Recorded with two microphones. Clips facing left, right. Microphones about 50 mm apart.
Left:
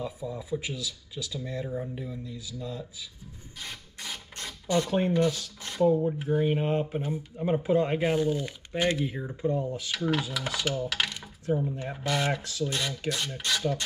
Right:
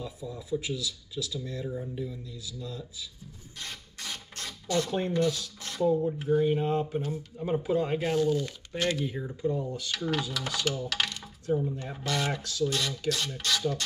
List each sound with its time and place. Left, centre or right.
0.0 s speech: centre
3.5 s rub: centre
4.6 s speech: centre
9.8 s speech: centre
11.4 s speech: left